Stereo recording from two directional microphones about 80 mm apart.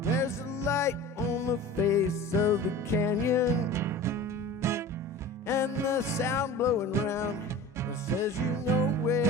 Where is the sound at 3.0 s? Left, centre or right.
Left.